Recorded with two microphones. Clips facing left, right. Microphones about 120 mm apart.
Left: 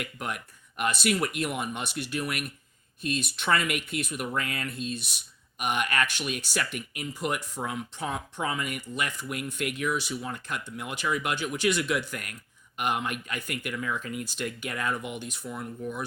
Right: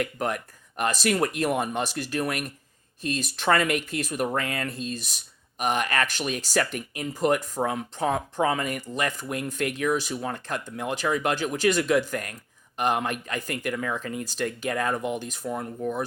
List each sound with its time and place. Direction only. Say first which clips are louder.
0.0 s speech: right 7 dB; 40° right (ahead or behind)